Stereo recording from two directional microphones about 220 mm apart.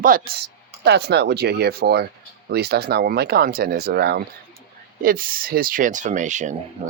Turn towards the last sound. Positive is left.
turn(degrees=-35)  # may be behind; listen again after turning